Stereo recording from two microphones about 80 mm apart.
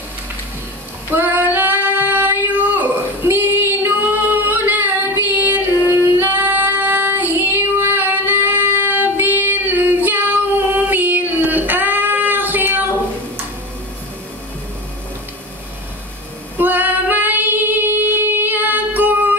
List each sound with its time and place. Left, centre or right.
1.1 s female singing: right
16.5 s female singing: right